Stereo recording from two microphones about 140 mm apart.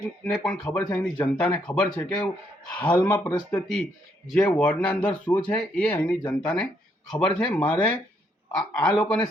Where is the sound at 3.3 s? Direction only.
30° left (ahead or behind).